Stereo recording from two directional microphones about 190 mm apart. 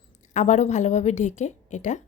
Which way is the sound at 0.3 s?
35° left (ahead or behind).